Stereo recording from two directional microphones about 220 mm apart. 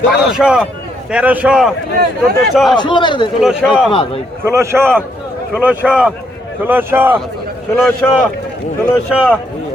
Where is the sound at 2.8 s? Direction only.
20° left (ahead or behind).